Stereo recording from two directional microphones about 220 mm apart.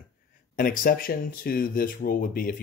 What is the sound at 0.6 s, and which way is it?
Speech, 40° left (ahead or behind).